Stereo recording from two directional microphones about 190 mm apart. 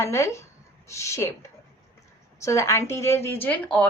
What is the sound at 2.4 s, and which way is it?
A woman's voice, 15° left (ahead or behind).